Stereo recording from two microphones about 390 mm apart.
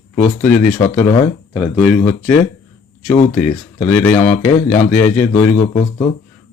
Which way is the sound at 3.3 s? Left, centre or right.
Centre.